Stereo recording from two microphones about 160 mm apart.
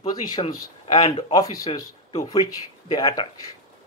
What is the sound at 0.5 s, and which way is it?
Speech, 20° left (ahead or behind).